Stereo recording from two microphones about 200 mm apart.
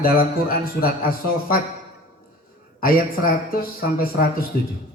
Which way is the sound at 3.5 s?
45° left (ahead or behind).